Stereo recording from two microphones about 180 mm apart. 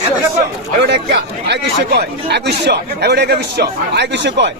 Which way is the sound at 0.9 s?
65° right (ahead or behind).